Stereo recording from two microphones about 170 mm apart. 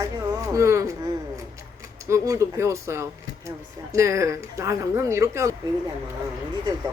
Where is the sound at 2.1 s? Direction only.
15° right (ahead or behind).